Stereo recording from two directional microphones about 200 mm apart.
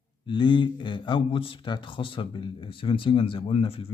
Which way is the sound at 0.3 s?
25° left (ahead or behind).